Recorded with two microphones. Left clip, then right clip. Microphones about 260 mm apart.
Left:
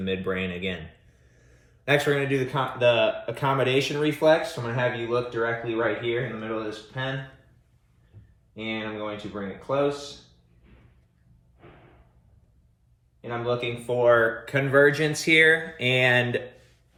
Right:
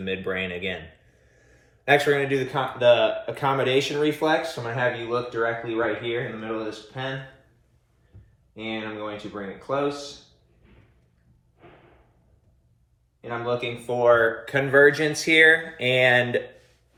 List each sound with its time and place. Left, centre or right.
0.0 s speech: centre
8.6 s speech: centre
13.2 s speech: centre